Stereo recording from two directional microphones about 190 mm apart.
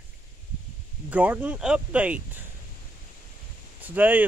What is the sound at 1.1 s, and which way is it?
Speech, 10° right (ahead or behind).